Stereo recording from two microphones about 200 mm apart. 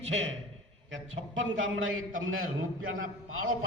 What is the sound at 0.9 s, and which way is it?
A man's voice, 80° right.